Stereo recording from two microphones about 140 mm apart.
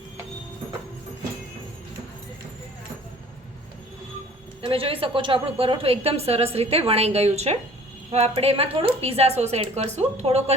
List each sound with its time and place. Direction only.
4.6 s a woman's voice: 40° right (ahead or behind)